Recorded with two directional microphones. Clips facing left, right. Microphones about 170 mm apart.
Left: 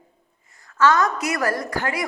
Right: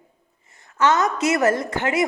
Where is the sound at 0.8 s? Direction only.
20° right (ahead or behind).